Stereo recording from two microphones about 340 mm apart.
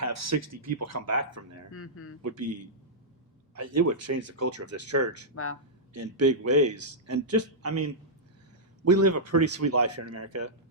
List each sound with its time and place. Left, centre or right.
0.0 s speech: right
1.7 s speech: left
2.2 s speech: right
5.3 s speech: left
5.9 s speech: right